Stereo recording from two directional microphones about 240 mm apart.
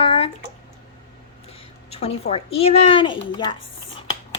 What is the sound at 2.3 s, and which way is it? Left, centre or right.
Speech, left.